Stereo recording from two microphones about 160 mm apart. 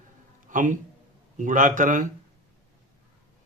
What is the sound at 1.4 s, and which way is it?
Mantra, 55° right (ahead or behind).